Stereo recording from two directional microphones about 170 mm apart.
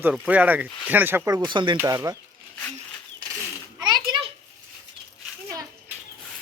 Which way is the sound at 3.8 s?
25° right (ahead or behind).